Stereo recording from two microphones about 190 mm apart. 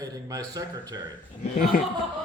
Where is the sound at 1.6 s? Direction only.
50° left (ahead or behind).